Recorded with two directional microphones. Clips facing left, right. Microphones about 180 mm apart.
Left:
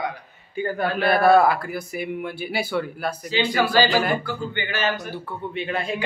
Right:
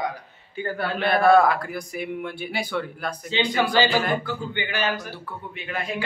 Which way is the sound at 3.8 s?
20° right (ahead or behind).